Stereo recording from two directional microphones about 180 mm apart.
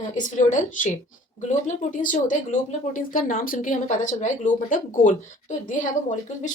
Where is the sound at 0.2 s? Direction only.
45° left (ahead or behind).